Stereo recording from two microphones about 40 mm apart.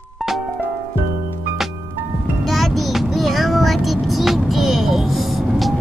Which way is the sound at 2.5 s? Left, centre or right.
Centre.